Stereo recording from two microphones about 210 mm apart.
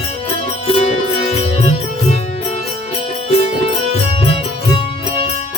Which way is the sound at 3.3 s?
30° left (ahead or behind).